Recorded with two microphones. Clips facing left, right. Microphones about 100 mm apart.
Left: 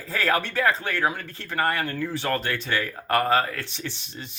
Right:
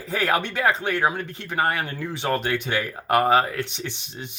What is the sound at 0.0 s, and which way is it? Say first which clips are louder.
Speech: right 1 dB; 20° right (ahead or behind).